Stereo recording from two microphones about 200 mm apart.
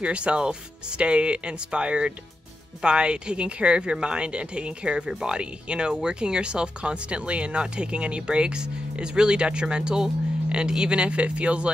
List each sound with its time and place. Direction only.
0.0 s speech: 5° right (ahead or behind)